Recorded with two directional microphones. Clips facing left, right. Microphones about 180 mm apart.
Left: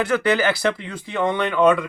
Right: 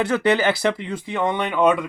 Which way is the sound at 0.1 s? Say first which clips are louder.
Right 1 dB; 25° right (ahead or behind).